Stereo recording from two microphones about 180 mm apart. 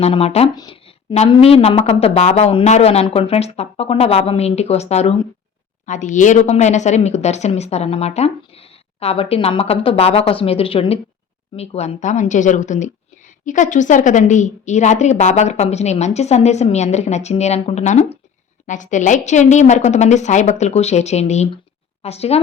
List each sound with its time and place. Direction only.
0.0 s a woman's voice: 35° left (ahead or behind)
0.5 s speech: 20° left (ahead or behind)
1.1 s a woman's voice: 35° left (ahead or behind)